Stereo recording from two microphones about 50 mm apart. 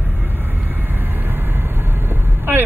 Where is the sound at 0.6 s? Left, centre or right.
Right.